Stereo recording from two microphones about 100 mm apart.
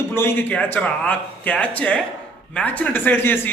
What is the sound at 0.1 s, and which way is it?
A woman's voice, 25° left (ahead or behind).